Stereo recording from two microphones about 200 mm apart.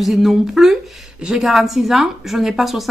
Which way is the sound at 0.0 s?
Centre (ahead or behind).